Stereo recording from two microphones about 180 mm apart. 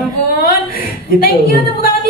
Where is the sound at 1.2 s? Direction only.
55° left (ahead or behind).